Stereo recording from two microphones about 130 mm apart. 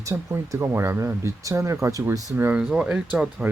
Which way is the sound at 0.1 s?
15° right (ahead or behind).